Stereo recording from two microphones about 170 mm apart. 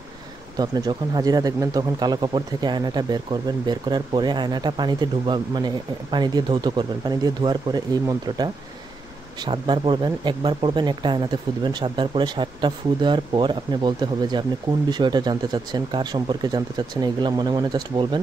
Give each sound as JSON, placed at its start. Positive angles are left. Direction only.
{"t": 0.6, "sound": "speech", "side_deg": -25}